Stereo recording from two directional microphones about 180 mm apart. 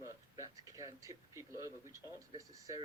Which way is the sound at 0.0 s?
20° right (ahead or behind).